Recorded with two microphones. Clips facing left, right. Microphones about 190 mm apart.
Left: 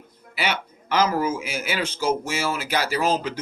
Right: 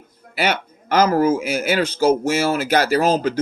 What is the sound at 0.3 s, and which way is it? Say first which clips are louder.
Speech: right 5 dB; 45° right (ahead or behind).